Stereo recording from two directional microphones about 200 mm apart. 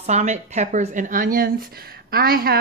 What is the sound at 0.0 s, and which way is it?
A woman's voice, 35° right (ahead or behind).